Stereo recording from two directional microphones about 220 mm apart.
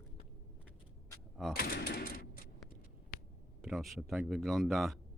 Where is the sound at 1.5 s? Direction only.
45° left (ahead or behind).